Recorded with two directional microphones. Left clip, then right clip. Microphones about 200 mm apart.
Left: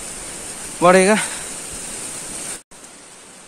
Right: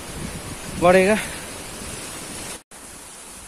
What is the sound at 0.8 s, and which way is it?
Speech, 15° left (ahead or behind).